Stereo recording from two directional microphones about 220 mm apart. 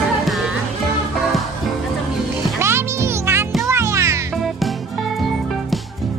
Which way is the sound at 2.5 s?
10° right (ahead or behind).